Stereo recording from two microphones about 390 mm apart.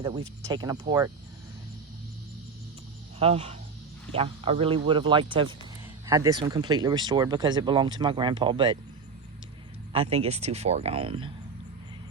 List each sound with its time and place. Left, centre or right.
0.0 s speech: centre
3.2 s speech: centre
9.9 s speech: centre